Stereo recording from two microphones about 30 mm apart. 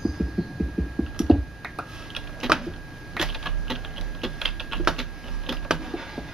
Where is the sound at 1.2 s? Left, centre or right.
Centre.